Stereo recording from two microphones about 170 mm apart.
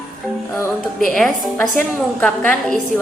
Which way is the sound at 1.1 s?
5° left (ahead or behind).